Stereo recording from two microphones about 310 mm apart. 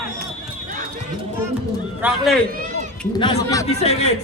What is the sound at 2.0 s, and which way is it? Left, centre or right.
Speech, centre.